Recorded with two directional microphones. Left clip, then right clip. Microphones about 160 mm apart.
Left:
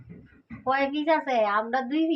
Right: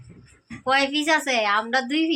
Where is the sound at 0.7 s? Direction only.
15° right (ahead or behind).